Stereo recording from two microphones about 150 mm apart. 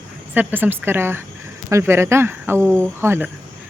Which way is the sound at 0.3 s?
15° right (ahead or behind).